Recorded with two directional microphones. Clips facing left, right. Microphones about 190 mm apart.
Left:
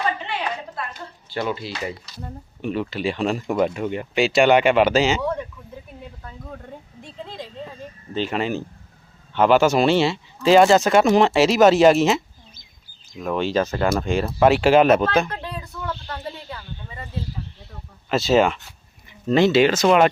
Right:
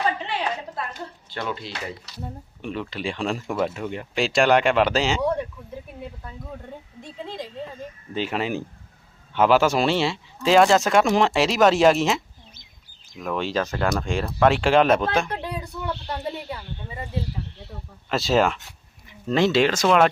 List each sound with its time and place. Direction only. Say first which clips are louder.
1.3 s speech: left 5 dB; 5° left (ahead or behind)
3.4 s speech: left 5 dB; 20° left (ahead or behind)
3.8 s speech: left 4 dB; 5° left (ahead or behind)
8.1 s speech: left 2 dB; 5° right (ahead or behind)
15.3 s a sound: right 2 dB; 15° right (ahead or behind)
16.5 s speech: right 2 dB; 15° right (ahead or behind)
18.1 s speech: left 3 dB; centre (ahead or behind)